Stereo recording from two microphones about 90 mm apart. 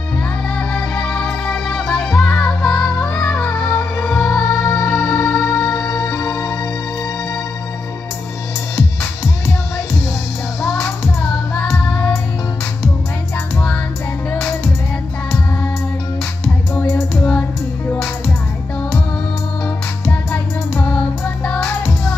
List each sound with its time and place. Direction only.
0.6 s music: 10° left (ahead or behind)
4.6 s music: 25° left (ahead or behind)
16.8 s music: 25° left (ahead or behind)
21.5 s music: 25° left (ahead or behind)